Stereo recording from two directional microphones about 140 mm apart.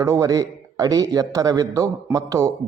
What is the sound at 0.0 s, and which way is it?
A man's voice, 25° right (ahead or behind).